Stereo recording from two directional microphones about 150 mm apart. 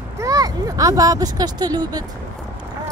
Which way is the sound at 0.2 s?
25° right (ahead or behind).